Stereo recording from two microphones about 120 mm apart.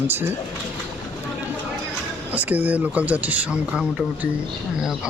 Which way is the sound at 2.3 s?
15° right (ahead or behind).